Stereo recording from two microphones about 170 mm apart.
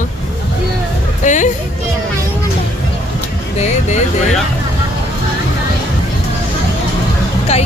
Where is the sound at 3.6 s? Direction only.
45° left (ahead or behind).